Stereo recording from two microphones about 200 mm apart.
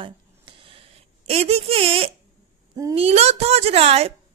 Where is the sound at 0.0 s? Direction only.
25° right (ahead or behind).